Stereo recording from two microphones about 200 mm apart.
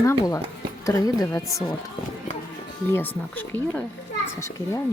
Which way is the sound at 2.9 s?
10° left (ahead or behind).